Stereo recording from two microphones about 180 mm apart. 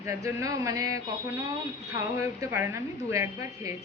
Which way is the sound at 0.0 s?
15° right (ahead or behind).